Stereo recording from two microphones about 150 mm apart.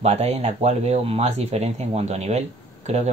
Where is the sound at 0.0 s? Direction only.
45° right (ahead or behind).